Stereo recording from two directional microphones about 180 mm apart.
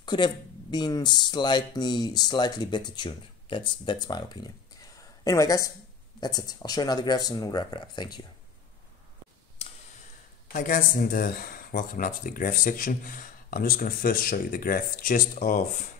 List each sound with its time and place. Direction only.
0.0 s speech: 25° left (ahead or behind)
10.5 s speech: 50° left (ahead or behind)